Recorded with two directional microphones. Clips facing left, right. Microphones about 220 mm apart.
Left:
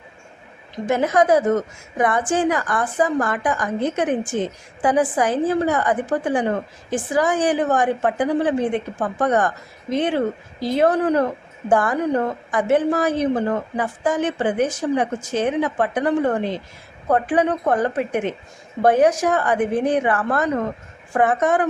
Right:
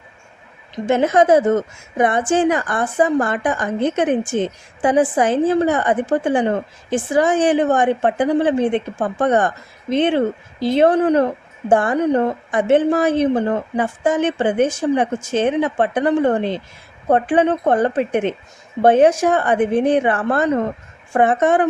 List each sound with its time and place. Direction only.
0.9 s a woman's voice: 25° right (ahead or behind)